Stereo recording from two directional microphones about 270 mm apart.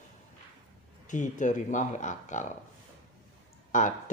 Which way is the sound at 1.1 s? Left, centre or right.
Left.